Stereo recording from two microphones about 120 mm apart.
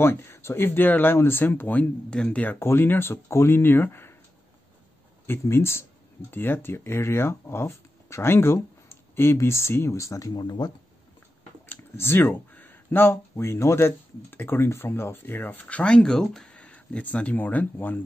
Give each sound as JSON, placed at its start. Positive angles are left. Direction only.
{"t": 0.0, "sound": "speech", "side_deg": 20}
{"t": 5.2, "sound": "speech", "side_deg": 20}
{"t": 11.7, "sound": "speech", "side_deg": 15}